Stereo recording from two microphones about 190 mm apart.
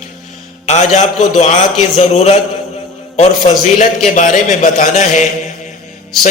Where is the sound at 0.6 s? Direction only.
35° left (ahead or behind).